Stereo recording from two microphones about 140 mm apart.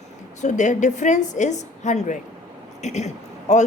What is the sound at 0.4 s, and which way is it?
A woman's voice, 60° left (ahead or behind).